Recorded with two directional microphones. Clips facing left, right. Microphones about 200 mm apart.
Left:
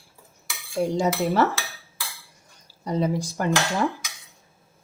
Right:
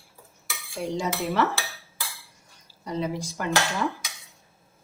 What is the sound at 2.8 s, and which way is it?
Speech, 40° left (ahead or behind).